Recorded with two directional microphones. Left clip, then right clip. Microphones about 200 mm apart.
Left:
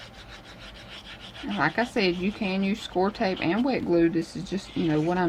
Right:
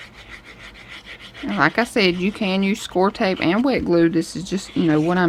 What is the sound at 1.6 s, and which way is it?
Speech, 45° right (ahead or behind).